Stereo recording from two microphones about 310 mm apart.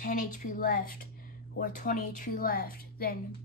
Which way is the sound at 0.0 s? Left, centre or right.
Left.